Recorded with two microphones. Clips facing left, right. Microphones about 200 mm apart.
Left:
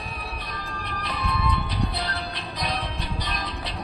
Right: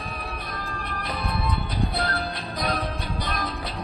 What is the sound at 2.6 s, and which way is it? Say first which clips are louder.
Music: right 3 dB; 50° right (ahead or behind).